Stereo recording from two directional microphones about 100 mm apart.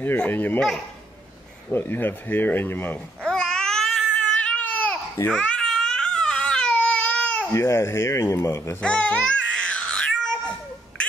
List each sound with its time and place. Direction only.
0.0 s a man's voice: 20° left (ahead or behind)
0.6 s speech: 5° left (ahead or behind)
1.7 s a man's voice: 20° left (ahead or behind)
3.3 s babbling: 5° left (ahead or behind)
5.3 s baby cry: 10° left (ahead or behind)
7.5 s a man's voice: 30° left (ahead or behind)
8.8 s babbling: 10° left (ahead or behind)